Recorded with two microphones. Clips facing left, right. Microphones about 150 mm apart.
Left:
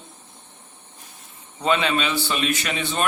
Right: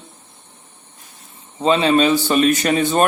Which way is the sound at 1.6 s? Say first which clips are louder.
Right 7 dB; 35° right (ahead or behind).